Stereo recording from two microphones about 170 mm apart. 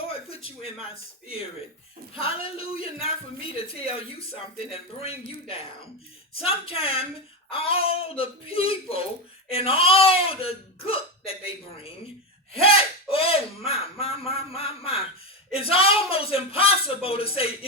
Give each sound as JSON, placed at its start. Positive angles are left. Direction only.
{"t": 2.1, "sound": "speech", "side_deg": 35}